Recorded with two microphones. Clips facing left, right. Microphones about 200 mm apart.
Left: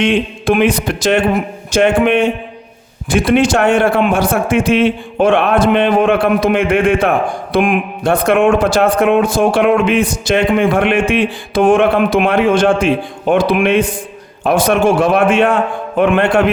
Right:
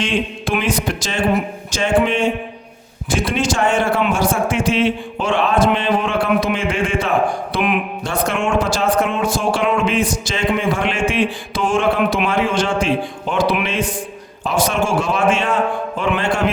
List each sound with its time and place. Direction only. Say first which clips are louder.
0.0 s a man's voice: left 6 dB; 60° left (ahead or behind)